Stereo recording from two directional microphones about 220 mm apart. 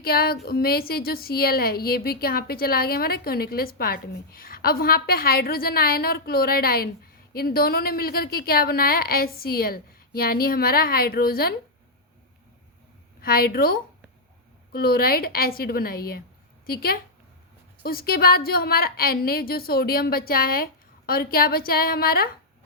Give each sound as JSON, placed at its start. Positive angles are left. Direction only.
{"t": 0.0, "sound": "a woman's voice", "side_deg": 45}
{"t": 13.2, "sound": "a woman's voice", "side_deg": 40}